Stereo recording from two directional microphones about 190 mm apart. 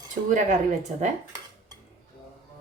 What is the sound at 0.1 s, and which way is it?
Speech, 40° right (ahead or behind).